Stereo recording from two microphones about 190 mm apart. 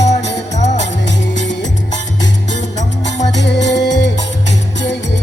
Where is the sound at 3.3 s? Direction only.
65° left (ahead or behind).